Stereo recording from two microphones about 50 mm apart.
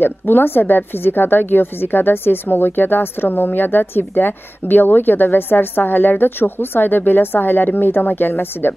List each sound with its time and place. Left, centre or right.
0.0 s a woman's voice: left